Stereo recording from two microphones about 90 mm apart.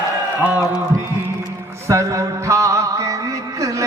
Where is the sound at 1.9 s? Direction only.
35° right (ahead or behind).